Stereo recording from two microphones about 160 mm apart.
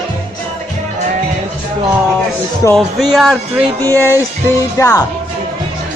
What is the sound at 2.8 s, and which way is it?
Speech, centre (ahead or behind).